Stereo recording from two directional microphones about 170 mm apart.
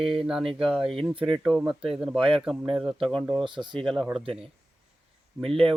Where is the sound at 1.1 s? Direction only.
30° right (ahead or behind).